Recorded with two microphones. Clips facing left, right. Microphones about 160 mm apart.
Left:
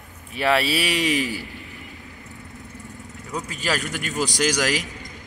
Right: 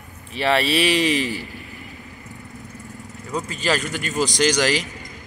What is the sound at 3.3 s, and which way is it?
Speech, centre (ahead or behind).